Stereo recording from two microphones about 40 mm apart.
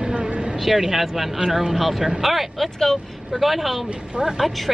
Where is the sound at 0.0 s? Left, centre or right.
Centre.